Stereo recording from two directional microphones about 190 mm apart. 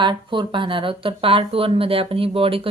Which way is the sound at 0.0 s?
25° right (ahead or behind).